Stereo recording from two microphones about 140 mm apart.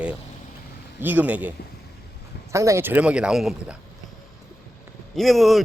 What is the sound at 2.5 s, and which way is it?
Speech, 20° right (ahead or behind).